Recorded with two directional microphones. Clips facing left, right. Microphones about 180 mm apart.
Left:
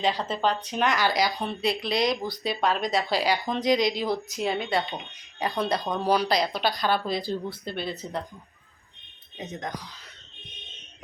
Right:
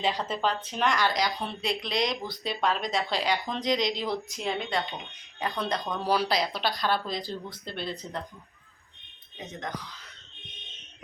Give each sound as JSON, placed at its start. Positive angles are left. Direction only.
{"t": 0.0, "sound": "speech", "side_deg": -5}
{"t": 9.4, "sound": "speech", "side_deg": 20}